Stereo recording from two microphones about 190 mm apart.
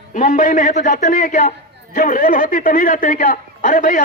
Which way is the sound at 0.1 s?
45° left (ahead or behind).